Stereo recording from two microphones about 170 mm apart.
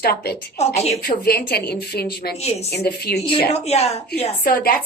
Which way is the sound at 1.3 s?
70° left (ahead or behind).